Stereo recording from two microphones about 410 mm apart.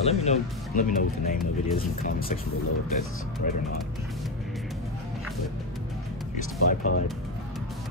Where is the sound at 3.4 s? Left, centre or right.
Centre.